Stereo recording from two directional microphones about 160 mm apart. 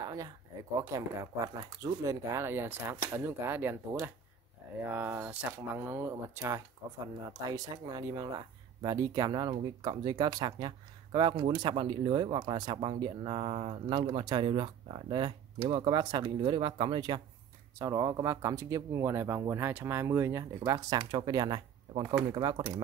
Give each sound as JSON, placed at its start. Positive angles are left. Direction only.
{"t": 0.0, "sound": "a sound", "side_deg": -20}
{"t": 0.7, "sound": "speech", "side_deg": -20}
{"t": 4.8, "sound": "speech", "side_deg": -10}